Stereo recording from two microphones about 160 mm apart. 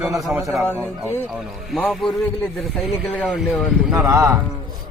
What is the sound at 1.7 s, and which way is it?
Speech, centre (ahead or behind).